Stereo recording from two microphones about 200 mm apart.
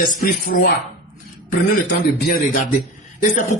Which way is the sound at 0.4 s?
45° left (ahead or behind).